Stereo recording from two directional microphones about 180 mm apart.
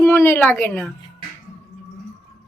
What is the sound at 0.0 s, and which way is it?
Speech, 10° left (ahead or behind).